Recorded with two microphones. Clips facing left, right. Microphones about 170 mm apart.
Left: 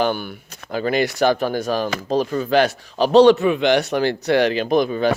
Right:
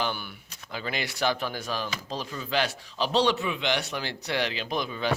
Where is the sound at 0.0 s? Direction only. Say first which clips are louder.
Left 10 dB; 50° left (ahead or behind).